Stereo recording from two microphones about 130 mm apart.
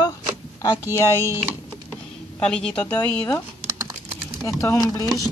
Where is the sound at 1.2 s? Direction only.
20° right (ahead or behind).